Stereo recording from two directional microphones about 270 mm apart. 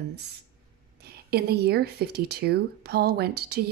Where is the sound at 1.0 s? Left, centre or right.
Right.